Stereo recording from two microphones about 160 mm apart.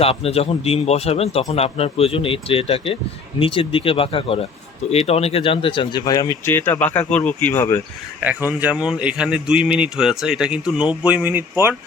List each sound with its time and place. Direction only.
0.0 s a man's voice: 40° left (ahead or behind); by 7.8 s 15° left (ahead or behind)
8.2 s a man's voice: 10° right (ahead or behind)